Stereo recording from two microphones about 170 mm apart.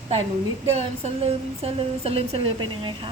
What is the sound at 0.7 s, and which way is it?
A woman's voice, 40° right (ahead or behind).